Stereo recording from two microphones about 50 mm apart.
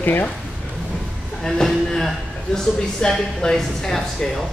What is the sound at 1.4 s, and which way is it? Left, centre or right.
A man's voice, centre.